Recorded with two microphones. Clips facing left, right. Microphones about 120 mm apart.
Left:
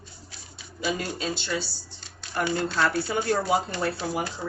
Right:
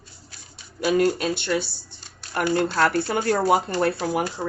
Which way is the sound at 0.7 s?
60° right (ahead or behind).